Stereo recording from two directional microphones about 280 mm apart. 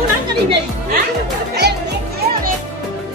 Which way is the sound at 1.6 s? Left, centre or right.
Right.